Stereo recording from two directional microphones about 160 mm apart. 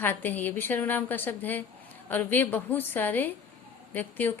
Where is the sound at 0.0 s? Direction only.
10° left (ahead or behind).